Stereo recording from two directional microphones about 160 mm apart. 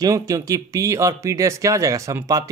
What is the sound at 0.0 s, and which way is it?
Speech, 20° right (ahead or behind).